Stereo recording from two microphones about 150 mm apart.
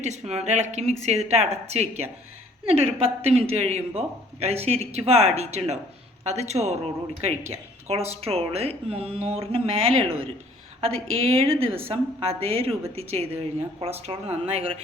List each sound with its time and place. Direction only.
0.0 s speech: 45° right (ahead or behind)
11.3 s speech: 40° right (ahead or behind)